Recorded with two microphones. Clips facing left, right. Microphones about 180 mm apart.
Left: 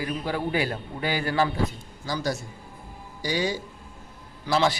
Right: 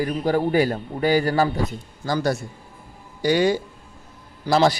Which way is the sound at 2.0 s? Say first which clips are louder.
Right 6 dB; 55° right (ahead or behind).